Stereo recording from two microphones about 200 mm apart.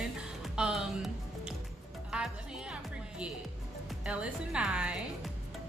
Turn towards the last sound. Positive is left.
turn(degrees=-5)  # may be behind; listen again after turning